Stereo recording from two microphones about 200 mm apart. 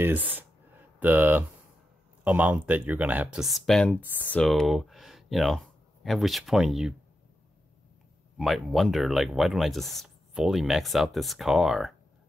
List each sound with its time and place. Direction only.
0.0 s speech: 10° right (ahead or behind)
8.4 s speech: centre (ahead or behind)